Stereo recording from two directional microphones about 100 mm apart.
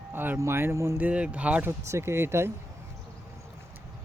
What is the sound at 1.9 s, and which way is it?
Speech, 30° right (ahead or behind).